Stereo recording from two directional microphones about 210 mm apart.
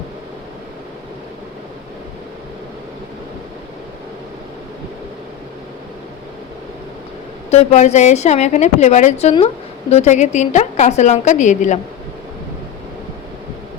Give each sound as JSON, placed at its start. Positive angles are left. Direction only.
{"t": 7.5, "sound": "a woman's voice", "side_deg": 35}